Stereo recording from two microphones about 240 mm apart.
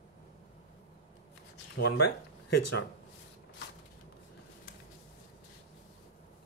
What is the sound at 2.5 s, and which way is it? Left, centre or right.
Speech, left.